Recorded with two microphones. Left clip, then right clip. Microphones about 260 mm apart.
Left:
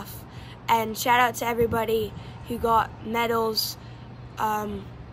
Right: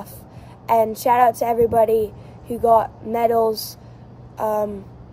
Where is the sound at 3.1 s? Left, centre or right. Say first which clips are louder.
Right 6 dB; centre.